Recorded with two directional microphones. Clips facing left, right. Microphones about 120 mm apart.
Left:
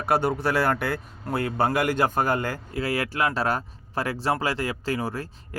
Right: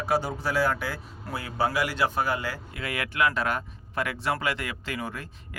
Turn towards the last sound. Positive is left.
turn(degrees=35)  # may be behind; listen again after turning